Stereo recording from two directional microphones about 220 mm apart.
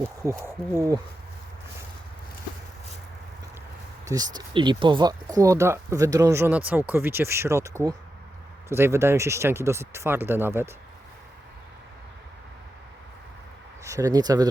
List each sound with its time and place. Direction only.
0.2 s speech: 15° right (ahead or behind)
4.0 s speech: 15° right (ahead or behind)
13.8 s speech: 15° right (ahead or behind)